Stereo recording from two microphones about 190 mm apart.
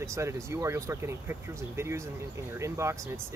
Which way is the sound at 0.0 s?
15° right (ahead or behind).